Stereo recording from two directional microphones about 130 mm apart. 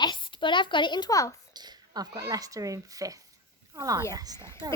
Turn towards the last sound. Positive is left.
turn(degrees=-30)  # may be behind; listen again after turning